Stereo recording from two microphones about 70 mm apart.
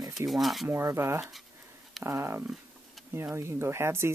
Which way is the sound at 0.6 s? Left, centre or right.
Right.